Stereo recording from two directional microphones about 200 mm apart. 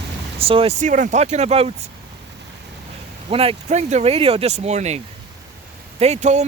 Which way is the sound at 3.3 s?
30° right (ahead or behind).